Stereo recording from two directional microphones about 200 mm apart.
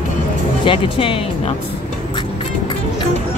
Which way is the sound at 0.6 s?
25° left (ahead or behind).